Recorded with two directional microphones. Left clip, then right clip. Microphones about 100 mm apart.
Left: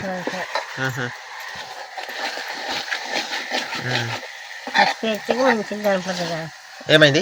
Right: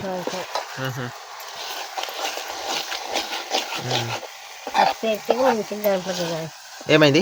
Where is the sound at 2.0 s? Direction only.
40° right (ahead or behind).